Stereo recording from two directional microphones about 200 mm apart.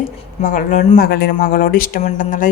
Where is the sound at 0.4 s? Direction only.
40° left (ahead or behind).